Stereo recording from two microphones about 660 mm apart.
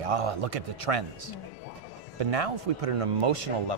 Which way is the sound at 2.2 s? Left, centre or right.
Right.